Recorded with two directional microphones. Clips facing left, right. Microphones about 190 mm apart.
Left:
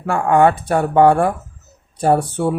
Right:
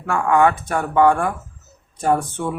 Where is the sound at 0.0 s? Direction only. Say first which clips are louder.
Left 3 dB; 30° left (ahead or behind).